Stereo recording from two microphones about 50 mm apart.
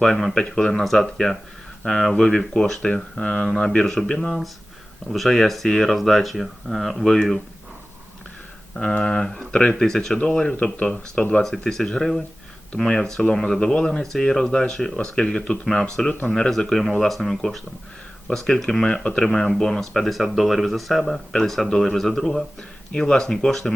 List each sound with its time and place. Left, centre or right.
0.0 s speech: centre
8.7 s speech: centre
10.6 s speech: left
11.4 s speech: centre
16.0 s speech: centre
18.3 s speech: centre